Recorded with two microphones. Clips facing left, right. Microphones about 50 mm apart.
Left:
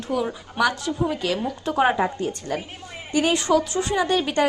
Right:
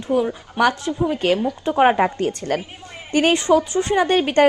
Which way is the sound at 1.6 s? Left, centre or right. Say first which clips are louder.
Right 4 dB; right.